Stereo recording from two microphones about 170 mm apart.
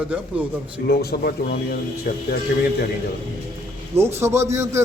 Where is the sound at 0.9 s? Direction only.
65° left (ahead or behind).